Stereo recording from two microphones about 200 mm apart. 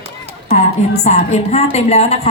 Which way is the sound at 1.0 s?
35° left (ahead or behind).